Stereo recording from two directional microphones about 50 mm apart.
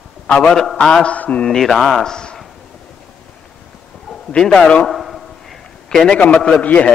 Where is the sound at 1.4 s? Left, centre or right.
Centre.